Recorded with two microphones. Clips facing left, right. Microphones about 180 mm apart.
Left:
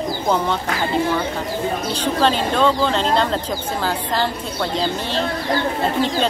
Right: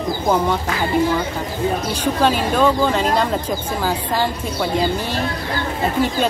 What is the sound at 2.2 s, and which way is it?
Speech, 10° right (ahead or behind).